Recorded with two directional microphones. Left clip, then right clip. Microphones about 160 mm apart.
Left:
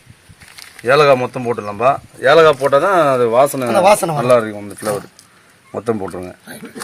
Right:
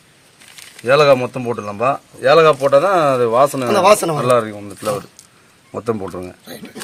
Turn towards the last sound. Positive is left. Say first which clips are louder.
# left 2 dB
turn(degrees=5)  # may be behind; listen again after turning